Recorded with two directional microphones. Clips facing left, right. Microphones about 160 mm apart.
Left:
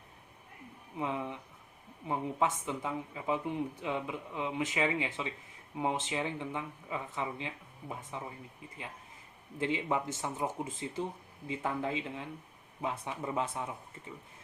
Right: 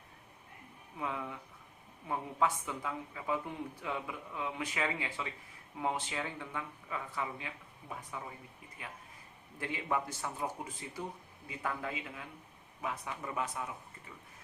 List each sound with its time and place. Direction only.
0.9 s speech: 20° left (ahead or behind)
9.6 s speech: 20° left (ahead or behind)